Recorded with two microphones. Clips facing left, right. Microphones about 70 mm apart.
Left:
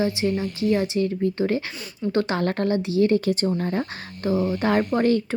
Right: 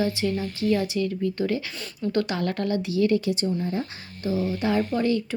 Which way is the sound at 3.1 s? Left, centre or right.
Left.